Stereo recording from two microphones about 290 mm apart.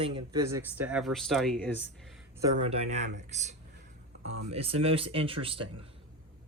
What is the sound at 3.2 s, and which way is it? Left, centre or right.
Speech, right.